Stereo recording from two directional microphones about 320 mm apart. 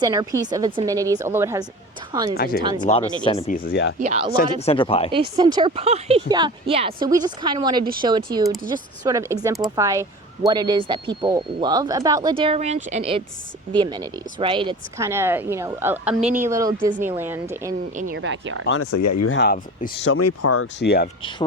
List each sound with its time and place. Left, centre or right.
0.0 s speech: centre
2.3 s speech: left
2.7 s speech: centre; by 3.9 s left
4.0 s speech: centre
4.6 s speech: centre
5.4 s speech: centre
18.1 s speech: right
18.6 s speech: left
18.9 s speech: left
19.3 s speech: left
20.1 s speech: left
21.2 s speech: centre